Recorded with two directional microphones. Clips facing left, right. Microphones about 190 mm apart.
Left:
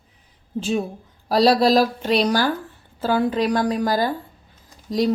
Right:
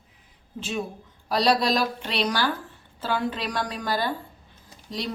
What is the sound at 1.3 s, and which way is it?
A woman's voice, 35° left (ahead or behind).